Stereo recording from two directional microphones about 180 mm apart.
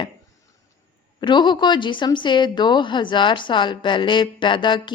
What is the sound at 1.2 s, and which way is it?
Speech, 25° left (ahead or behind).